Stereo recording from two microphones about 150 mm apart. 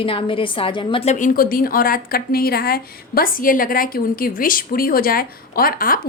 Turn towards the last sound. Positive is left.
turn(degrees=70)  # may be behind; listen again after turning